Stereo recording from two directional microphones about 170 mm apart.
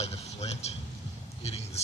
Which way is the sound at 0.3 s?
40° left (ahead or behind).